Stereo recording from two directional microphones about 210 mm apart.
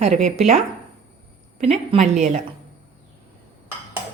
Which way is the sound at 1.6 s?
30° right (ahead or behind).